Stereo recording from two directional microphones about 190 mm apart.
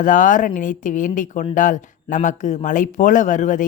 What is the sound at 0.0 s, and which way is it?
Speech, 45° left (ahead or behind).